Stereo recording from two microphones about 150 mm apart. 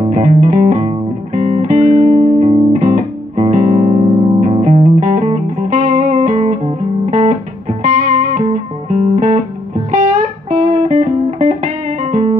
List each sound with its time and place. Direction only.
0.1 s music: 55° right (ahead or behind)